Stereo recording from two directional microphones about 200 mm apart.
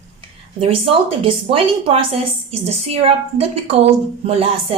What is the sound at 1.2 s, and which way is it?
A woman's voice, 25° right (ahead or behind).